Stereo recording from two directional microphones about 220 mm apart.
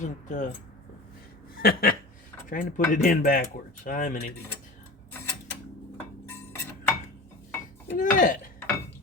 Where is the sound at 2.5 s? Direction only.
35° left (ahead or behind).